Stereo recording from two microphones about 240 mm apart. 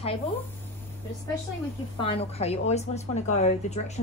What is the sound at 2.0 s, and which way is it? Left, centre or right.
A woman's voice, left.